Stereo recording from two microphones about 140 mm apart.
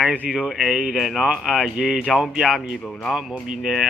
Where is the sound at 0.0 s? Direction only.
10° right (ahead or behind).